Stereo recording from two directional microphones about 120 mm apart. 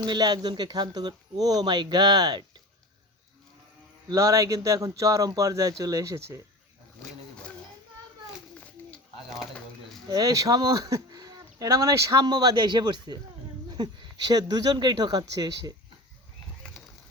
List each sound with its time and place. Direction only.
0.0 s speech: 35° right (ahead or behind)
4.1 s speech: 25° right (ahead or behind)
10.1 s speech: 30° right (ahead or behind)